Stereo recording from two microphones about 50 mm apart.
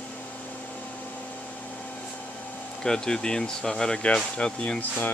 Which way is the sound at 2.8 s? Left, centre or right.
Centre.